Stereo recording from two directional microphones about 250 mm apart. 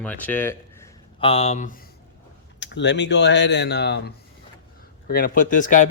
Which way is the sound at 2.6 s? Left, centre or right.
Left.